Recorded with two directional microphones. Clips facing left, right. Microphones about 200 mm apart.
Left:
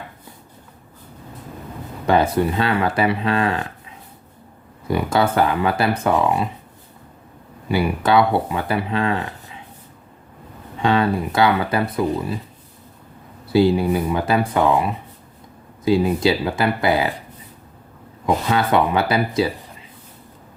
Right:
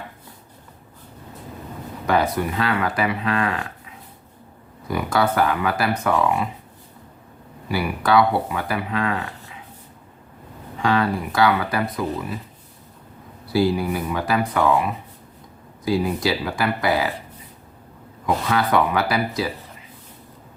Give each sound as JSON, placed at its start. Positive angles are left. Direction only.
{"t": 2.0, "sound": "speech", "side_deg": 25}
{"t": 4.9, "sound": "speech", "side_deg": 25}
{"t": 7.7, "sound": "speech", "side_deg": 25}
{"t": 10.8, "sound": "speech", "side_deg": 25}
{"t": 13.5, "sound": "speech", "side_deg": 25}
{"t": 18.4, "sound": "speech", "side_deg": 25}